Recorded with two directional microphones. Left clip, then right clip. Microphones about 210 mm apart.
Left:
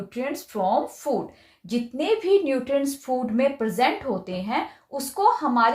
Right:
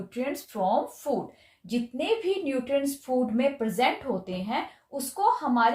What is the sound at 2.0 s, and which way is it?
A woman's voice, 25° left (ahead or behind).